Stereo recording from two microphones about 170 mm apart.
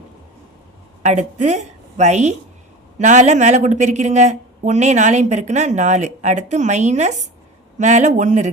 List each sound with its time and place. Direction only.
1.0 s a woman's voice: 45° right (ahead or behind)